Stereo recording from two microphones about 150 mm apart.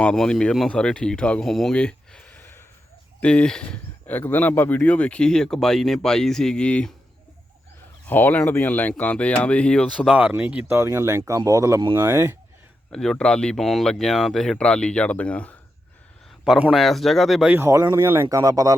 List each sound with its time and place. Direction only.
0.0 s speech: 5° left (ahead or behind)
8.0 s speech: 10° left (ahead or behind)
10.1 s speech: 10° right (ahead or behind)
12.9 s speech: 5° left (ahead or behind)
16.4 s speech: 5° right (ahead or behind)
17.6 s speech: 15° right (ahead or behind)